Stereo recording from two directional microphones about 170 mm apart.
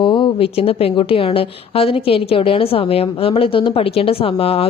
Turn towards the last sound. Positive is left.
turn(degrees=35)  # may be behind; listen again after turning